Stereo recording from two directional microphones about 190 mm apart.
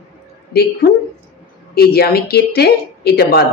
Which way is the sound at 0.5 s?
55° left (ahead or behind).